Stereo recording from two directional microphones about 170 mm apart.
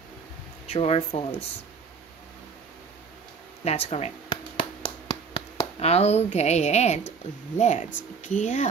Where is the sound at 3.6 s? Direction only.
40° left (ahead or behind).